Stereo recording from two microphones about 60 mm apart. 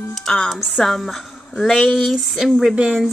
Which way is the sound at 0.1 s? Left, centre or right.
Centre.